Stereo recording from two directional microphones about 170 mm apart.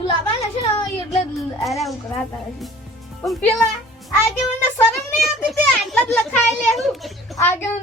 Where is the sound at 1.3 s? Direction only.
Centre (ahead or behind).